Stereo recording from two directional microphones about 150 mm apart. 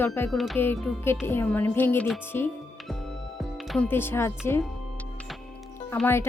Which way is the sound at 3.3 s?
Centre (ahead or behind).